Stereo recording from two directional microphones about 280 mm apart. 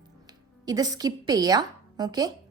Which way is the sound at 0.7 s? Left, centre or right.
Centre.